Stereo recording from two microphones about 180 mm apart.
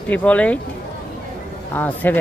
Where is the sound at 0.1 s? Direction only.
10° left (ahead or behind).